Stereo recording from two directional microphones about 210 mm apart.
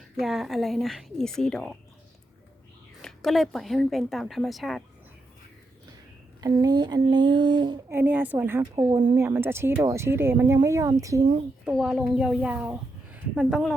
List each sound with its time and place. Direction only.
0.2 s a child's voice: centre (ahead or behind)
3.0 s a child's voice: centre (ahead or behind)
6.4 s speech: 20° right (ahead or behind)
11.6 s a child's voice: 5° right (ahead or behind)